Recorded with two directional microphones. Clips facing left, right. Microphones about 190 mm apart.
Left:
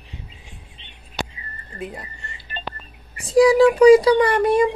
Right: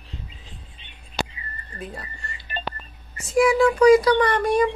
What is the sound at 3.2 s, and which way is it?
Speech, 35° left (ahead or behind).